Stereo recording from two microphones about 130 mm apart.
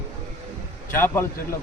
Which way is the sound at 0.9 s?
15° left (ahead or behind).